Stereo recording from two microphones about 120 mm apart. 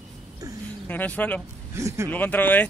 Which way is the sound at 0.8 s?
15° left (ahead or behind).